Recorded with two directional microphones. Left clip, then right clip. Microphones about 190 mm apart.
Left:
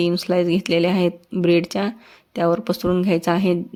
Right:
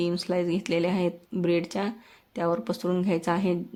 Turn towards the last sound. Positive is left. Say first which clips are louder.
# left 7 dB
turn(degrees=30)  # may be behind; listen again after turning